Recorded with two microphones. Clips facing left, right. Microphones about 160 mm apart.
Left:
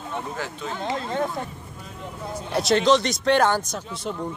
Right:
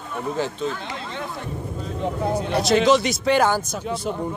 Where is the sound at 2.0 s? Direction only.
70° right (ahead or behind).